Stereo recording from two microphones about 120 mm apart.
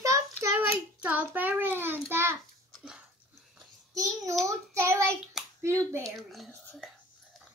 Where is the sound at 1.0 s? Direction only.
15° right (ahead or behind).